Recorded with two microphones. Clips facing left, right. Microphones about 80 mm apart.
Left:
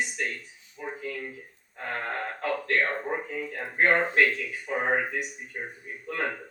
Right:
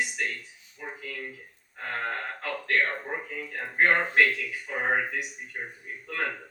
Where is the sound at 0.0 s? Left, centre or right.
Left.